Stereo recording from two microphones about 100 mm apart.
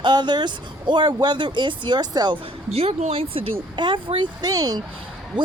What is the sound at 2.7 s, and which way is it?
Speech, 90° right.